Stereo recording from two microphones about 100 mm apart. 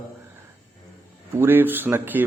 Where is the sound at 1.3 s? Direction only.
20° right (ahead or behind).